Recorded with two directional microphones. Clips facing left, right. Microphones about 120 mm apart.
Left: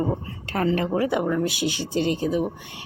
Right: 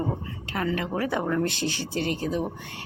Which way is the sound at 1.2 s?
5° left (ahead or behind).